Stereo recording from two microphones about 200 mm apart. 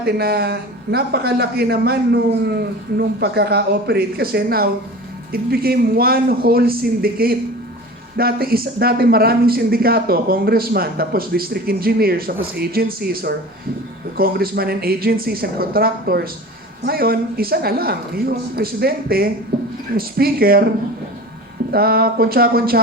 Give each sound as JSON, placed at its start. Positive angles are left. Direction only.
{"t": 0.0, "sound": "speech", "side_deg": -50}
{"t": 21.7, "sound": "speech", "side_deg": -50}